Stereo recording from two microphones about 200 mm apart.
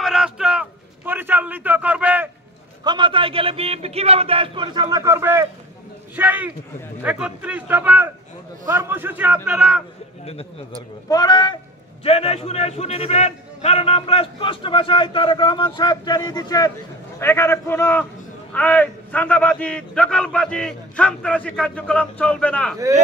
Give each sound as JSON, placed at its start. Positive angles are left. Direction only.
{"t": 0.0, "sound": "a sound", "side_deg": -5}
{"t": 2.8, "sound": "a man's voice", "side_deg": -20}
{"t": 11.1, "sound": "a man's voice", "side_deg": 20}